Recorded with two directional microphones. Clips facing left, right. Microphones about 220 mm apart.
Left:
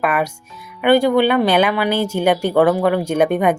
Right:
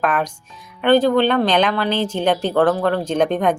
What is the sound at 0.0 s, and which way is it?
Speech, 10° left (ahead or behind).